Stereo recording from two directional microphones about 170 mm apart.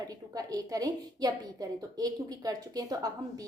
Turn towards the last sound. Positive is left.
turn(degrees=-20)  # may be behind; listen again after turning